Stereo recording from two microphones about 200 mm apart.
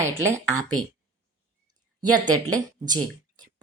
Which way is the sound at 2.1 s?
20° right (ahead or behind).